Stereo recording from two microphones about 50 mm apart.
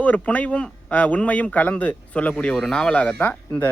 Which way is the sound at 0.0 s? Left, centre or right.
Left.